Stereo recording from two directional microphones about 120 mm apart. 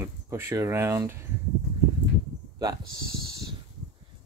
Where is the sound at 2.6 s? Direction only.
30° right (ahead or behind).